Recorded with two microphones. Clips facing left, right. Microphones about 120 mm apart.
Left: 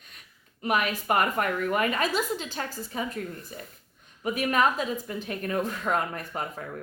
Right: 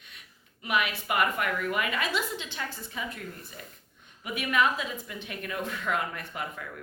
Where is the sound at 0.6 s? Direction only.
40° left (ahead or behind).